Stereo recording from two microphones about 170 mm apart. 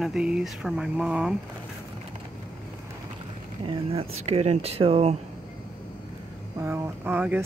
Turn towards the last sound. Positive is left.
turn(degrees=-10)  # may be behind; listen again after turning